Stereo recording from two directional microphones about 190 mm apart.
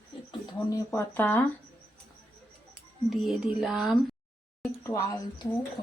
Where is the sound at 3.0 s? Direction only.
Centre (ahead or behind).